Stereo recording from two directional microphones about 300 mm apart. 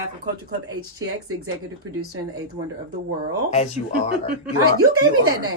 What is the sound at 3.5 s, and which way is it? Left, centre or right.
Speech, left.